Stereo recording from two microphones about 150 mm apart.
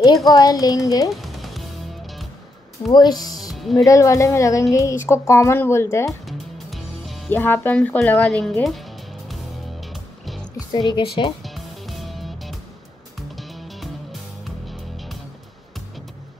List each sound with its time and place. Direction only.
0.3 s a woman's voice: 25° left (ahead or behind)
1.1 s music: centre (ahead or behind)
2.9 s a woman's voice: 25° left (ahead or behind)
3.3 s speech: centre (ahead or behind)
3.7 s a woman's voice: 20° left (ahead or behind)
6.2 s music: centre (ahead or behind)
7.2 s speech: 15° left (ahead or behind)
10.2 s music: centre (ahead or behind)
10.7 s a woman's voice: 30° left (ahead or behind)
11.4 s music: centre (ahead or behind)